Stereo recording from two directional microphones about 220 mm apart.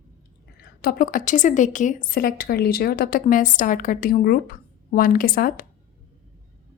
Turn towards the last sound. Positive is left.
turn(degrees=40)  # may be behind; listen again after turning